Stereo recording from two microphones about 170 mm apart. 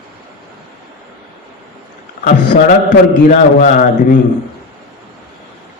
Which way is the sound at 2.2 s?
50° left (ahead or behind).